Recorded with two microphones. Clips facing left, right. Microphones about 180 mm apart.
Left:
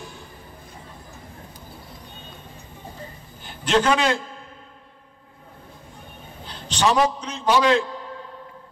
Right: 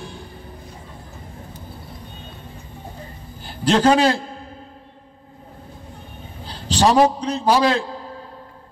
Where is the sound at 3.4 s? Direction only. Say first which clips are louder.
Right 4 dB; 35° right (ahead or behind).